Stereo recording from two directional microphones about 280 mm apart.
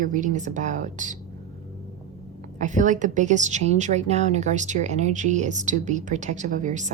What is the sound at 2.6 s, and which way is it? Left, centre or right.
A woman's voice, right.